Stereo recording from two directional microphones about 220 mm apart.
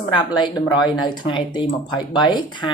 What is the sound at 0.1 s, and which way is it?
Speech, 20° left (ahead or behind).